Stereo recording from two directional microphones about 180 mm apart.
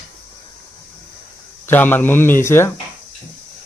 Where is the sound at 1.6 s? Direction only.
10° left (ahead or behind).